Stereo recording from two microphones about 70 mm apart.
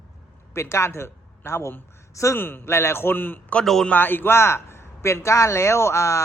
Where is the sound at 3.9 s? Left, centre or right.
Left.